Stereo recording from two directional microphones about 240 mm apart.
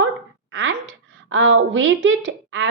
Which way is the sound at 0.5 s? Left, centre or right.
Right.